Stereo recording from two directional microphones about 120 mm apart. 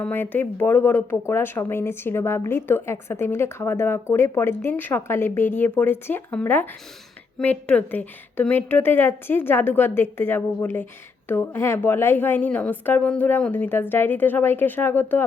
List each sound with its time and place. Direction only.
0.0 s a woman's voice: 15° left (ahead or behind)